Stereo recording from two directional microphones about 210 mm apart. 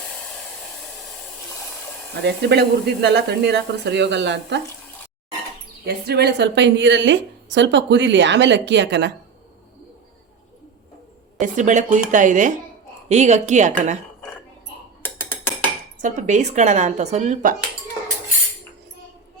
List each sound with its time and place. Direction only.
2.2 s speech: 50° right (ahead or behind)
5.8 s a woman's voice: 50° right (ahead or behind)
11.3 s speech: 35° right (ahead or behind)
15.0 s music: 10° left (ahead or behind)
16.0 s speech: 35° right (ahead or behind)